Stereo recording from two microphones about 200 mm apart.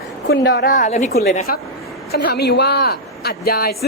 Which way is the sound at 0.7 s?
40° left (ahead or behind).